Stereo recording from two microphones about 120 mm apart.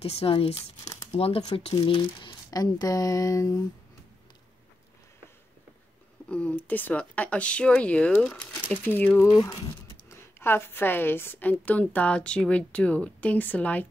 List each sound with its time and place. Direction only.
0.0 s speech: 55° left (ahead or behind)
1.7 s speech: 40° left (ahead or behind)
6.2 s speech: 10° left (ahead or behind)
9.4 s speech: 30° left (ahead or behind); by 13.8 s 10° left (ahead or behind)